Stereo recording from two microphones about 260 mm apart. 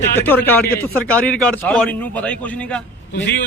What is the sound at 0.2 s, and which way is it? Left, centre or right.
Speech, centre.